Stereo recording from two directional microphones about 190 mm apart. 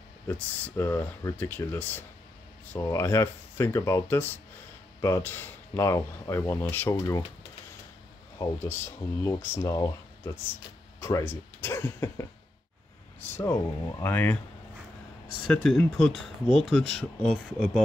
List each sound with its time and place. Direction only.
0.3 s speech: 10° left (ahead or behind)
9.2 s speech: 15° left (ahead or behind)
13.4 s speech: 15° left (ahead or behind)
15.4 s speech: 5° left (ahead or behind)